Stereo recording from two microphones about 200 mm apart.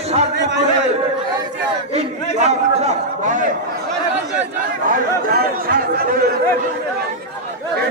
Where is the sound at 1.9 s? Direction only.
35° right (ahead or behind).